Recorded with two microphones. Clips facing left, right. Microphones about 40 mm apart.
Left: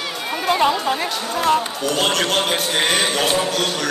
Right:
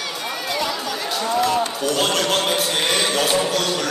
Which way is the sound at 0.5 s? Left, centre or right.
Left.